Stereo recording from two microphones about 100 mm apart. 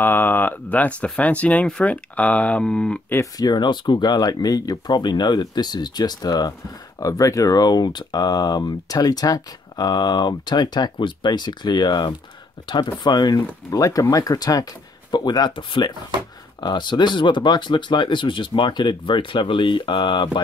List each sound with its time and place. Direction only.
0.0 s speech: 20° left (ahead or behind)
3.3 s speech: 45° left (ahead or behind)